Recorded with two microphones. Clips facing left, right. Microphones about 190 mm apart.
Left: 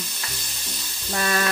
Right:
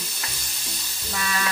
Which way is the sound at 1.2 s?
50° left (ahead or behind).